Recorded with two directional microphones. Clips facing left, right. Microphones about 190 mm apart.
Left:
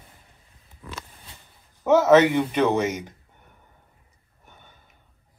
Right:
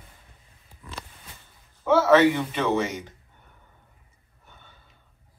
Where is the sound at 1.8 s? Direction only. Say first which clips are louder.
Left 2 dB; 20° left (ahead or behind).